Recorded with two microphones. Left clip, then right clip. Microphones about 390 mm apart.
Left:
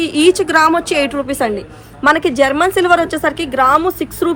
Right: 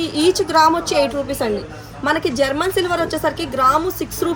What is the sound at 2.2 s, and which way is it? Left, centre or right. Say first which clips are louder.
Speech: left 6 dB; centre.